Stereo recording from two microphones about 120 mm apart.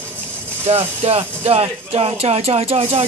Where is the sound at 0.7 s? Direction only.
55° right (ahead or behind).